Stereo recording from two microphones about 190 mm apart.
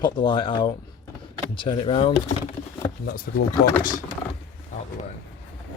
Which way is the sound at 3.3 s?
45° left (ahead or behind).